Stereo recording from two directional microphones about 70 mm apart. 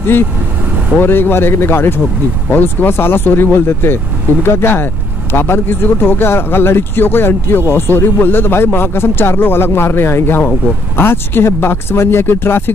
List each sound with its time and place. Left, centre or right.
1.0 s speech: left